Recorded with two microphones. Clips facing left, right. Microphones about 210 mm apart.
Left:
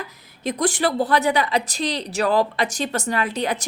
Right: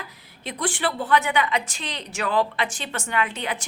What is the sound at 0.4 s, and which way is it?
A woman's voice, 40° left (ahead or behind).